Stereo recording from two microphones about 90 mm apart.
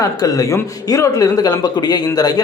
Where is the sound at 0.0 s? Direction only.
40° left (ahead or behind).